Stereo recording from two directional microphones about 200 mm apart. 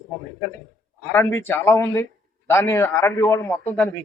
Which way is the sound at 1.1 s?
10° left (ahead or behind).